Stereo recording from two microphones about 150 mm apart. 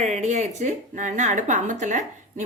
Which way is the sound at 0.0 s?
50° right (ahead or behind).